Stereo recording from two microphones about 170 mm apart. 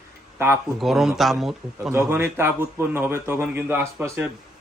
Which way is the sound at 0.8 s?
Centre (ahead or behind).